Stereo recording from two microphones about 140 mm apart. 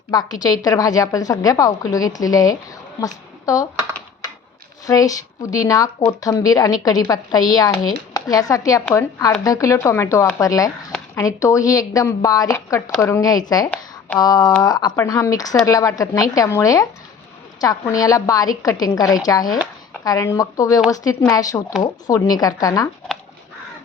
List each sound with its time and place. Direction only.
0.1 s a woman's voice: 30° left (ahead or behind)
4.9 s a woman's voice: 25° left (ahead or behind)